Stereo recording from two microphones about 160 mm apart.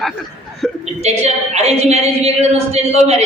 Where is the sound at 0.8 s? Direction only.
45° right (ahead or behind).